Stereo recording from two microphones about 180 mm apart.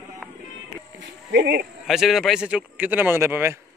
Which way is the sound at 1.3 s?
70° right (ahead or behind).